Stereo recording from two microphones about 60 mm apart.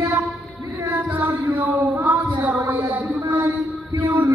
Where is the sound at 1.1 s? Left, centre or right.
Right.